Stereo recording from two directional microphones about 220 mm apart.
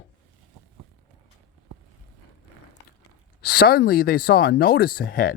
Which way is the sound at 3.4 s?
45° left (ahead or behind).